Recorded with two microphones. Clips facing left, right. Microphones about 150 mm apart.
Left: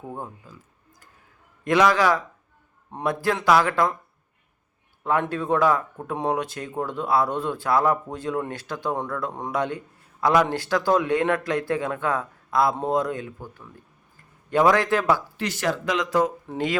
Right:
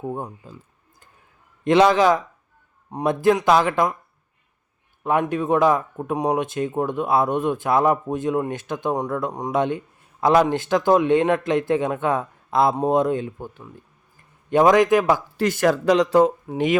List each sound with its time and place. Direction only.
0.0 s speech: 20° right (ahead or behind)
1.6 s speech: 20° right (ahead or behind)
5.0 s speech: 15° right (ahead or behind)
15.4 s speech: 50° right (ahead or behind); by 16.3 s 35° right (ahead or behind)
16.5 s speech: 15° right (ahead or behind)